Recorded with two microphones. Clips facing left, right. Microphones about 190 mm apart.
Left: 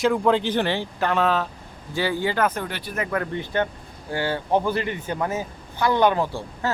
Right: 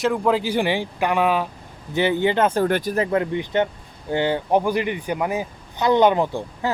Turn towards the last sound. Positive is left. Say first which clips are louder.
# right 3 dB
turn(degrees=-20)  # may be behind; listen again after turning